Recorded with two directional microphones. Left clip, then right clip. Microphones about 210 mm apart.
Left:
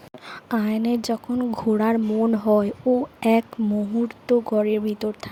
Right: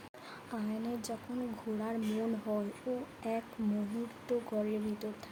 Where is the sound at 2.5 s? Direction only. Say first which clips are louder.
Left 17 dB; 50° left (ahead or behind).